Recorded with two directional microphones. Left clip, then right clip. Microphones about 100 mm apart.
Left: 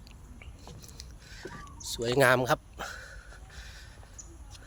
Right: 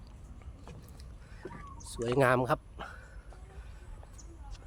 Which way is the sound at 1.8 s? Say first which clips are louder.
Left 4 dB; 20° right (ahead or behind).